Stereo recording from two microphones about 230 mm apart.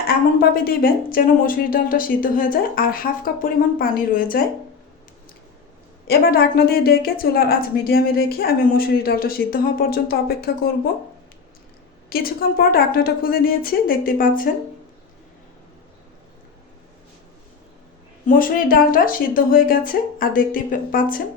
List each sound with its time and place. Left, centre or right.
0.3 s a woman's voice: left
6.1 s a woman's voice: left
12.0 s a woman's voice: left
18.3 s a woman's voice: left